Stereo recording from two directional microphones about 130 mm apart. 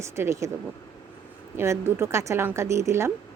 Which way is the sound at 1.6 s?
20° right (ahead or behind).